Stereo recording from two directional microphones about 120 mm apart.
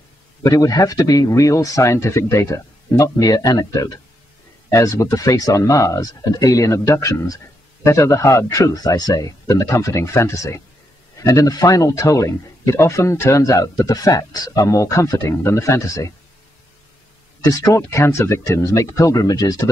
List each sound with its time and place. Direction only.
0.4 s speech: 30° left (ahead or behind)
17.5 s speech: 30° left (ahead or behind)